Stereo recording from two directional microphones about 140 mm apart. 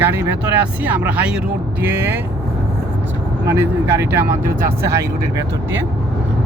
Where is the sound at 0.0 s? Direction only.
15° right (ahead or behind).